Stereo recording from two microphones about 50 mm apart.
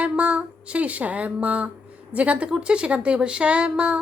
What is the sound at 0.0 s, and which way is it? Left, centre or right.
Speech, right.